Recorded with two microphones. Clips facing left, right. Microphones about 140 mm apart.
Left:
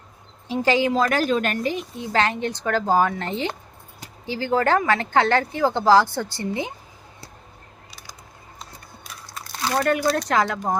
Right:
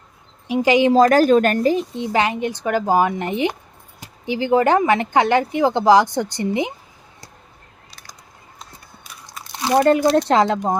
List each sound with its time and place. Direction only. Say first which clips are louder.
0.4 s speech: right 5 dB; 15° right (ahead or behind)
0.9 s speech: right 8 dB; 40° right (ahead or behind)
2.0 s speech: right 3 dB; 15° right (ahead or behind)
7.9 s a sound: even; 10° left (ahead or behind)
9.2 s speech: right 3 dB; 20° right (ahead or behind)